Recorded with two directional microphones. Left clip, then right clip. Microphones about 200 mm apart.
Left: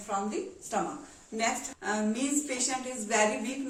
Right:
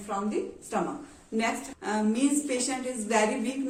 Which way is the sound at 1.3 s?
20° left (ahead or behind).